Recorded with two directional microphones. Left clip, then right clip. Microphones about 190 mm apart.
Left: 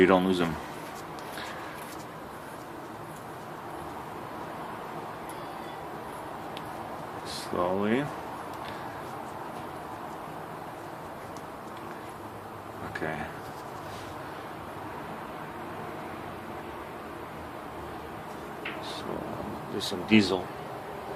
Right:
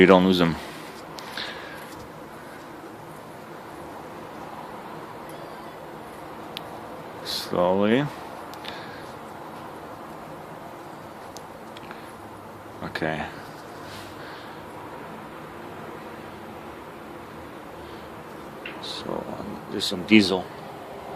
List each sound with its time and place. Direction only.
0.0 s speech: 45° right (ahead or behind)
7.3 s speech: 45° right (ahead or behind)
12.9 s speech: 45° right (ahead or behind)
19.7 s speech: 45° right (ahead or behind)